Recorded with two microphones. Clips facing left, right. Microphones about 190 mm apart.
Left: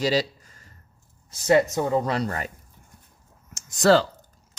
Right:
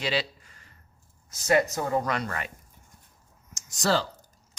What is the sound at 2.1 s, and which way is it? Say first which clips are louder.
Speech: left 5 dB; 35° left (ahead or behind).